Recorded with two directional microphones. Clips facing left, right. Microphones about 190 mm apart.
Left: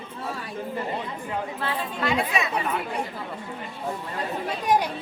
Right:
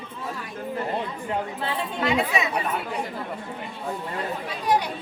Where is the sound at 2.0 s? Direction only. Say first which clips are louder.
Right 2 dB; 20° right (ahead or behind).